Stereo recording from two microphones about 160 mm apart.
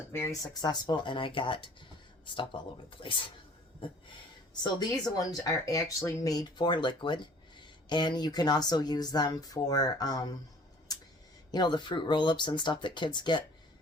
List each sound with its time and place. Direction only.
0.1 s speech: 15° left (ahead or behind)
4.6 s speech: 25° left (ahead or behind)
11.5 s speech: 25° left (ahead or behind)